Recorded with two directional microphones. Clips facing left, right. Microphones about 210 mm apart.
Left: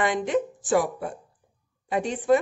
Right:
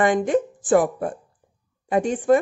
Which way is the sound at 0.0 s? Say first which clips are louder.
Right 5 dB; 50° right (ahead or behind).